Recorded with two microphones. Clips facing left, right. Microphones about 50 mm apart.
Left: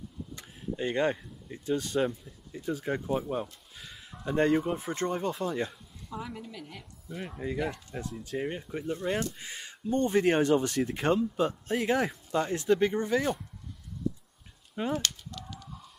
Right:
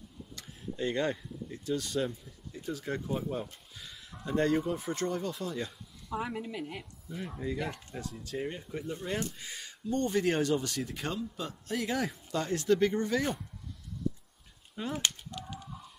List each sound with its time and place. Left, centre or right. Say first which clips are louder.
0.4 s speech: left 1 dB; left
2.0 s a sound: left 5 dB; centre
2.6 s speech: left 4 dB; left
3.7 s a sound: left 1 dB; centre
4.3 s speech: left 3 dB; left
6.1 s a woman's voice: right 4 dB; right
7.2 s speech: left 2 dB; centre
9.1 s speech: left 4 dB; left
15.0 s a sound: even; right
15.5 s chicken: right 1 dB; centre